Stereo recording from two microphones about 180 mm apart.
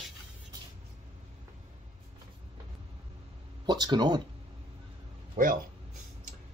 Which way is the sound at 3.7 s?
25° right (ahead or behind).